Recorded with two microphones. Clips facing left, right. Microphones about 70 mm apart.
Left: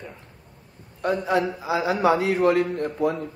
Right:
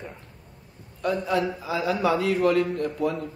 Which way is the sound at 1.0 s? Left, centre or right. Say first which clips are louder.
Left 2 dB; left.